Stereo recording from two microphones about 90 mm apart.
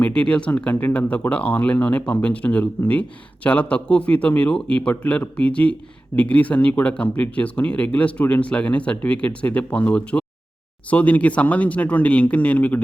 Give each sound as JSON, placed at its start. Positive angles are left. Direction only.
{"t": 0.0, "sound": "speech", "side_deg": 15}